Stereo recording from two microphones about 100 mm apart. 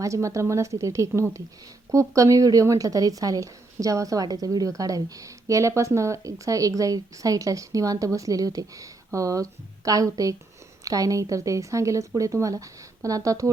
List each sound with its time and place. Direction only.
0.0 s speech: 30° right (ahead or behind)